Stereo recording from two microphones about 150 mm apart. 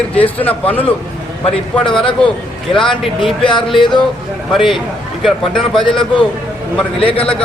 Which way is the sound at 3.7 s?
30° left (ahead or behind).